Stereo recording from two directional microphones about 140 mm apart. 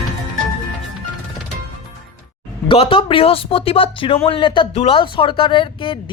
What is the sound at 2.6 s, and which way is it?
Speech, 40° left (ahead or behind).